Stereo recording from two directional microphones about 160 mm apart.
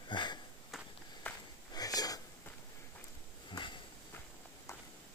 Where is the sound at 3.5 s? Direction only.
30° left (ahead or behind).